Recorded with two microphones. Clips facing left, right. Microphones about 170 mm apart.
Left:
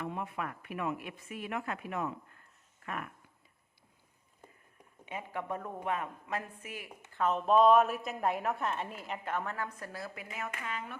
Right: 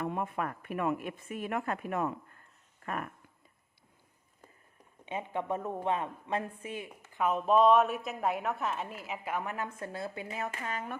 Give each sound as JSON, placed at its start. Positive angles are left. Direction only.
{"t": 0.0, "sound": "speech", "side_deg": -50}
{"t": 5.0, "sound": "a woman's voice", "side_deg": -25}
{"t": 7.1, "sound": "a woman's voice", "side_deg": -10}